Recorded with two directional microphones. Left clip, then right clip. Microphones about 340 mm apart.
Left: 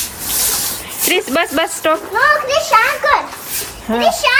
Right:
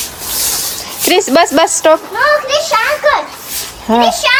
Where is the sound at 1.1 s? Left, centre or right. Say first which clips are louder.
Right 6 dB; centre.